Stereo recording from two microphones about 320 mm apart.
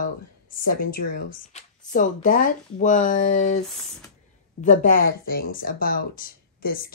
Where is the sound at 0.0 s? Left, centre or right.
Left.